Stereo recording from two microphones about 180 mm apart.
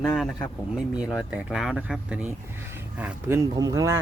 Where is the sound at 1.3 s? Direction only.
5° right (ahead or behind).